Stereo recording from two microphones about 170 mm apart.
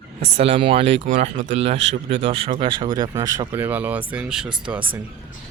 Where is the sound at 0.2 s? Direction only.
35° right (ahead or behind); by 4.5 s 5° right (ahead or behind).